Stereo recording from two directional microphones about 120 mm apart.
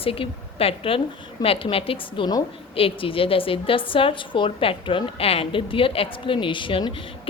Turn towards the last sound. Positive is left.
turn(degrees=45)  # may be behind; listen again after turning